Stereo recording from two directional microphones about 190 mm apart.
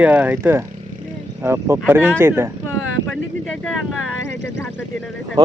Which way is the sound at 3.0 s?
5° left (ahead or behind).